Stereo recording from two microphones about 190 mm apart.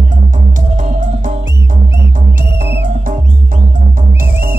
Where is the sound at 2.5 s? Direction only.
60° right (ahead or behind).